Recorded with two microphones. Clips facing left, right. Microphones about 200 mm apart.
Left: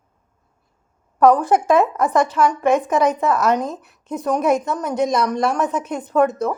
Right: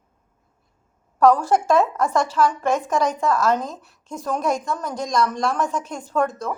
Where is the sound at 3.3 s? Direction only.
20° left (ahead or behind).